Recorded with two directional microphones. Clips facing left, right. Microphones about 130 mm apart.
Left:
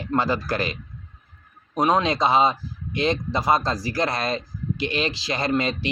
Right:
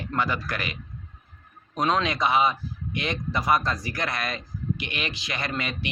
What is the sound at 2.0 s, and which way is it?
Speech, 30° left (ahead or behind).